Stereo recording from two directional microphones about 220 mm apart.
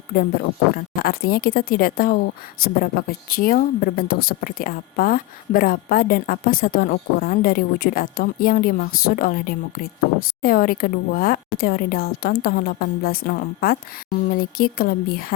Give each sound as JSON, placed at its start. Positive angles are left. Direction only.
{"t": 0.7, "sound": "speech", "side_deg": 45}